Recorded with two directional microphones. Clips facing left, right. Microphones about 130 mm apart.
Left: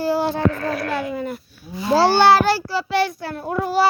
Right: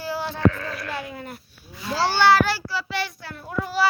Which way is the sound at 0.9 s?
90° left.